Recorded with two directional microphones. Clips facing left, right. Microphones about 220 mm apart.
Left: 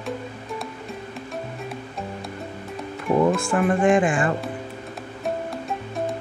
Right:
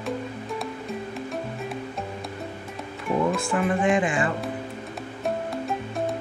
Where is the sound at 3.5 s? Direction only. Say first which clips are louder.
Left 3 dB; 50° left (ahead or behind).